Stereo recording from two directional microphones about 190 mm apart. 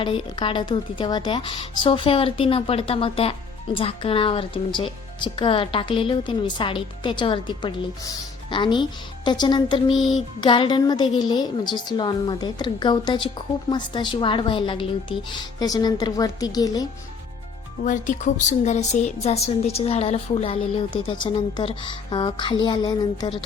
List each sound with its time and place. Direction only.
0.0 s a woman's voice: 25° left (ahead or behind)
17.8 s a woman's voice: 40° left (ahead or behind); by 23.3 s 20° left (ahead or behind)